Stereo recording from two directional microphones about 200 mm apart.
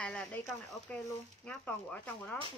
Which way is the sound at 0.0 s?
5° left (ahead or behind).